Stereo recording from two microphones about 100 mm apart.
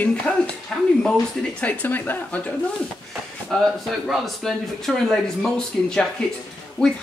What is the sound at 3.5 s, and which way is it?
Speech, 5° left (ahead or behind).